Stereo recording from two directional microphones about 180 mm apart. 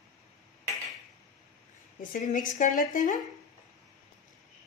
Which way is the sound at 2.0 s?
45° left (ahead or behind).